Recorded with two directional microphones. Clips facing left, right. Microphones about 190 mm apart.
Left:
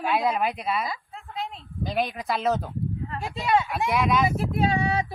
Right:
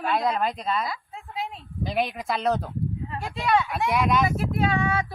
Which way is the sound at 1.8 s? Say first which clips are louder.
Even; centre (ahead or behind).